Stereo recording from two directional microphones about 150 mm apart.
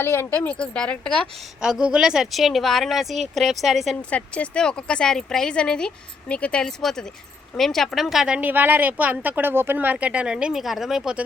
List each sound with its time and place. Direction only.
0.0 s a woman's voice: 15° left (ahead or behind); by 11.2 s 5° right (ahead or behind)